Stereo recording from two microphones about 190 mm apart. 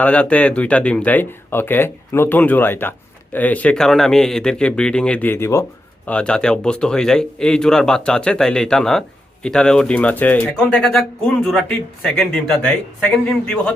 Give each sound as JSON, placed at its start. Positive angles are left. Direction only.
{"t": 0.0, "sound": "speech", "side_deg": 5}